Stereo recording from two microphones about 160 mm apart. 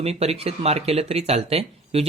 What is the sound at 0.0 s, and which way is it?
Speech, 40° right (ahead or behind).